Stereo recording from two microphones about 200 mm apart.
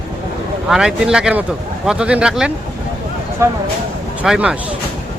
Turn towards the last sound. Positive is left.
turn(degrees=-5)  # may be behind; listen again after turning